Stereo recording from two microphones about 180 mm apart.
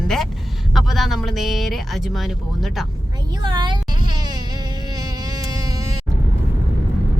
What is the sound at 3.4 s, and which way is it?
Speech, 25° right (ahead or behind).